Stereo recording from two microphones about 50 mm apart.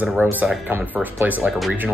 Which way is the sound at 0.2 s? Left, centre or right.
Right.